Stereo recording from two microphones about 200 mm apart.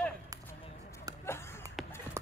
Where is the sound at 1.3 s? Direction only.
10° left (ahead or behind).